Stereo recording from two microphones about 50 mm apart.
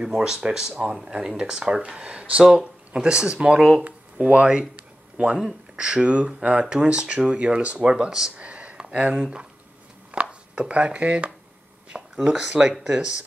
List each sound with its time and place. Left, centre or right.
0.0 s speech: centre
8.4 s a sound: right
9.2 s speech: centre
10.1 s chopping: right
10.5 s speech: right